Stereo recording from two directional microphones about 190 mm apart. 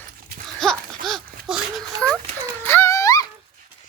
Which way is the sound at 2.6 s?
10° left (ahead or behind).